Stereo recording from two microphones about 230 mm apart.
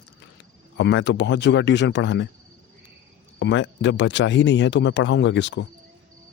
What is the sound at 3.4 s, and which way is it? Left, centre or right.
Speech, left.